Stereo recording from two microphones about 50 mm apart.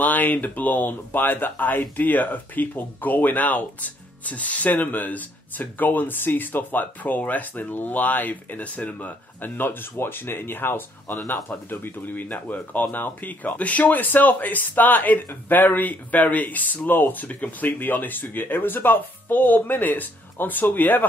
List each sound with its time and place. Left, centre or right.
0.0 s speech: left